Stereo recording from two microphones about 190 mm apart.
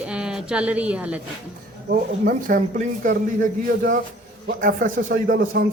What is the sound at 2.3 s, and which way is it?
Speech, 45° right (ahead or behind).